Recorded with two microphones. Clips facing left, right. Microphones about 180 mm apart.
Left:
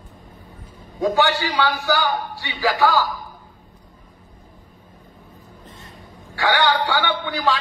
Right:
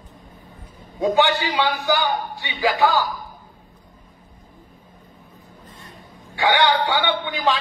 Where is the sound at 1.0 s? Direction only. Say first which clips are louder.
Right 1 dB; 15° right (ahead or behind).